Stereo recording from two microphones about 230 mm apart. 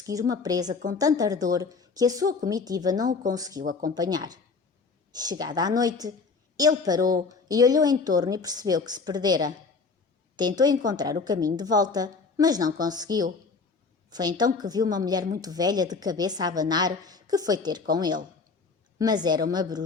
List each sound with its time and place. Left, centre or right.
0.0 s a woman's voice: centre
3.6 s speech: right
3.8 s a woman's voice: centre